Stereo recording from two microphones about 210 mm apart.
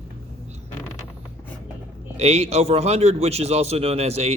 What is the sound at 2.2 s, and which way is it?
A man's voice, 30° right (ahead or behind).